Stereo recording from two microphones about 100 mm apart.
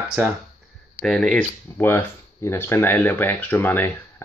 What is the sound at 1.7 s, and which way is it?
Speech, 20° left (ahead or behind).